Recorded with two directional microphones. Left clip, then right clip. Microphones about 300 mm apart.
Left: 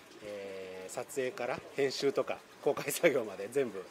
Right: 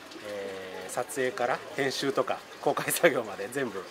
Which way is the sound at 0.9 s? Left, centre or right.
Centre.